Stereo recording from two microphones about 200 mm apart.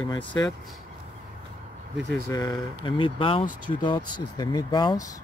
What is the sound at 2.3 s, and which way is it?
Speech, 20° left (ahead or behind).